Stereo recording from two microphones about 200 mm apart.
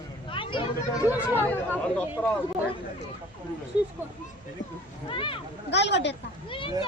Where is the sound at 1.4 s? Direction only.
5° left (ahead or behind).